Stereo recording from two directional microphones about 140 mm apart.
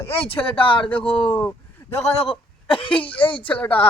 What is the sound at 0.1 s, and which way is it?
Speech, 40° left (ahead or behind).